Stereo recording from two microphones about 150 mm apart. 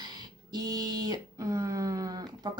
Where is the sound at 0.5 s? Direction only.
25° right (ahead or behind).